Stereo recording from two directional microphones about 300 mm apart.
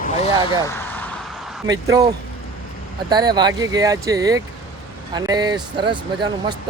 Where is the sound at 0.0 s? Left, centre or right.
Centre.